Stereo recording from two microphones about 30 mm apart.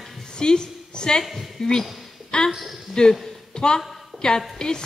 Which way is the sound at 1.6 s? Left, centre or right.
Left.